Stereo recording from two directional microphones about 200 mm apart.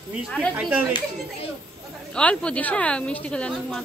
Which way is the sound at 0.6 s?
5° right (ahead or behind).